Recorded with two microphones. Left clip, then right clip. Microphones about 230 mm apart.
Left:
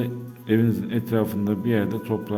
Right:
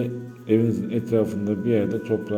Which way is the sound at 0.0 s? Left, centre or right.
Left.